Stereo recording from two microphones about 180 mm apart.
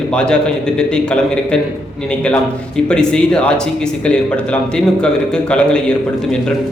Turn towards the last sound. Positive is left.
turn(degrees=5)  # may be behind; listen again after turning